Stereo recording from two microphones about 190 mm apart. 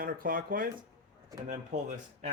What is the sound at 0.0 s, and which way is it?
Speech, 50° right (ahead or behind).